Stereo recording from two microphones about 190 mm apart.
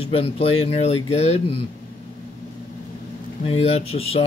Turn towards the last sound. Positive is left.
turn(degrees=30)  # may be behind; listen again after turning